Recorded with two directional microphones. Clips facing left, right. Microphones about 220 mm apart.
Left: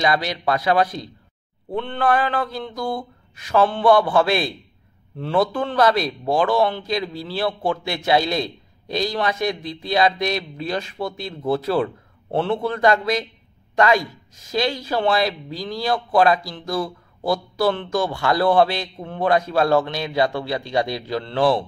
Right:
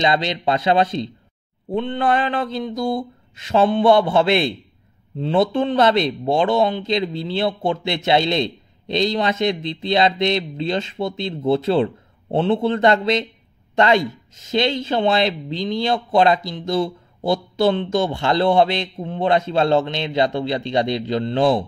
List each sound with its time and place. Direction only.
0.0 s a man's voice: 25° right (ahead or behind)